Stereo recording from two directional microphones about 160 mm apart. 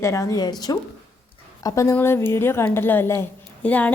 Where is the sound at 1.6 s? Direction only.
20° left (ahead or behind).